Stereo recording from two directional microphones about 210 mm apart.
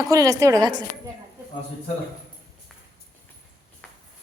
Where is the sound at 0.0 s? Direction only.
15° right (ahead or behind).